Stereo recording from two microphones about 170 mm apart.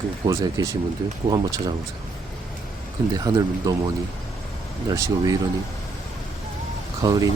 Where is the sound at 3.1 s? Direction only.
20° right (ahead or behind).